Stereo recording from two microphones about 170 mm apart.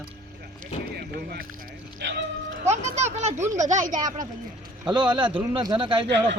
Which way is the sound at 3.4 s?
20° right (ahead or behind).